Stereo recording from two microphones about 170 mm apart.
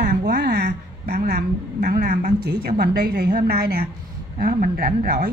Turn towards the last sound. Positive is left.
turn(degrees=-65)  # may be behind; listen again after turning